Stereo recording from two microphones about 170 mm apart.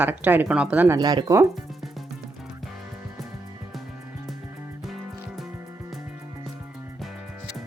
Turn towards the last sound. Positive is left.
turn(degrees=0)  # may be behind; listen again after turning